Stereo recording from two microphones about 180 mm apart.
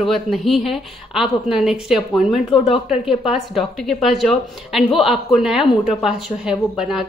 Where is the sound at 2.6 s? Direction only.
35° left (ahead or behind).